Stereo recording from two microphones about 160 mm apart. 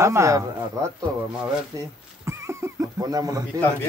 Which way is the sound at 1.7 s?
15° right (ahead or behind).